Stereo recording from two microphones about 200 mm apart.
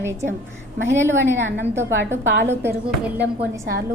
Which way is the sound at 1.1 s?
70° right (ahead or behind).